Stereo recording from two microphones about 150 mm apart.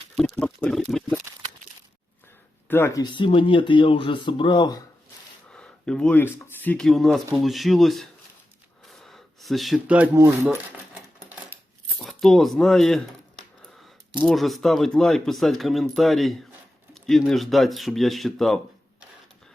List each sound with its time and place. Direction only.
0.2 s speech: 5° left (ahead or behind)
2.6 s speech: 15° left (ahead or behind)
3.0 s speech: 30° left (ahead or behind)
5.5 s a sound: 5° left (ahead or behind)
6.8 s speech: centre (ahead or behind)
8.9 s a sound: centre (ahead or behind)
10.2 s speech: 15° right (ahead or behind)
11.3 s scissors: 10° right (ahead or behind)
12.0 s speech: centre (ahead or behind)